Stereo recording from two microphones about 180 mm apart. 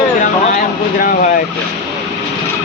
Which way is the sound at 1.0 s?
50° left (ahead or behind).